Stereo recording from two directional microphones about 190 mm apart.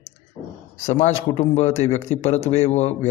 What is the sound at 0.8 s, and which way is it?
A man's voice, 35° left (ahead or behind).